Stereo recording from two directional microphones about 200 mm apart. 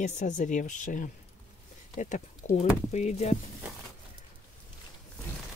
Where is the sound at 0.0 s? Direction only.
35° left (ahead or behind).